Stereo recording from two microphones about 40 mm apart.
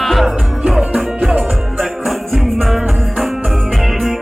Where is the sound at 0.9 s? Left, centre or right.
Right.